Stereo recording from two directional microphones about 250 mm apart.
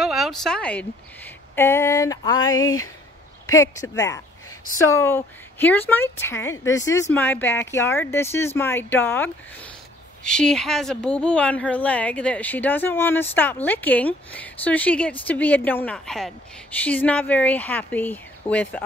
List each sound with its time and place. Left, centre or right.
0.0 s a woman's voice: centre
2.4 s speech: left
3.4 s a woman's voice: centre